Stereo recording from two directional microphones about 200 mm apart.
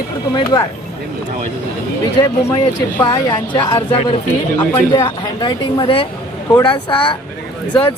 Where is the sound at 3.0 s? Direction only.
20° left (ahead or behind).